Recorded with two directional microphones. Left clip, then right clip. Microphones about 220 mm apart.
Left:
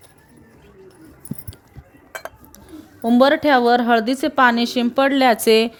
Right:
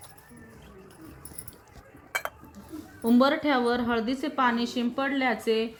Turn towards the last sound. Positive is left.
turn(degrees=55)  # may be behind; listen again after turning